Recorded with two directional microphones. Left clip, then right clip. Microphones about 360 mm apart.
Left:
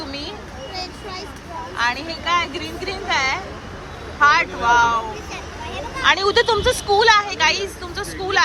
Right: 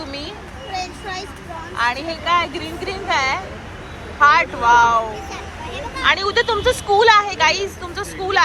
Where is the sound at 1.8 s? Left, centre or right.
Centre.